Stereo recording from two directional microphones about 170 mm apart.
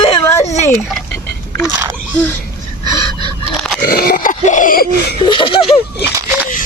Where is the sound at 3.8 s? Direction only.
65° left (ahead or behind).